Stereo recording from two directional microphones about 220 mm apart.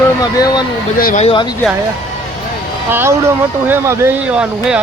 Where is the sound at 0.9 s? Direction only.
40° left (ahead or behind).